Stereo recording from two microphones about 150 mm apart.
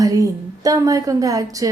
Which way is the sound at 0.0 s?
20° right (ahead or behind).